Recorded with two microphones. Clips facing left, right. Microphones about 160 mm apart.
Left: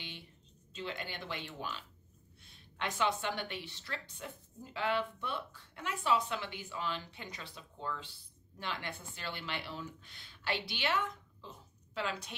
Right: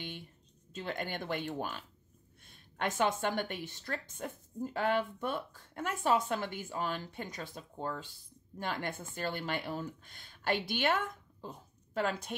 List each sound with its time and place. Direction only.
0.7 s a woman's voice: 50° right (ahead or behind)